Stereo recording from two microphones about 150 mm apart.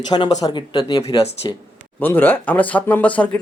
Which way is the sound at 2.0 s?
15° left (ahead or behind).